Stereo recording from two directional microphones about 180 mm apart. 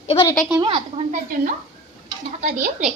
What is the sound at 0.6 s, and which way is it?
A woman's voice, 30° right (ahead or behind).